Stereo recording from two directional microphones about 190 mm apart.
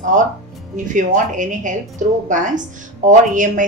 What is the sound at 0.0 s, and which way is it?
A woman's voice, 40° right (ahead or behind).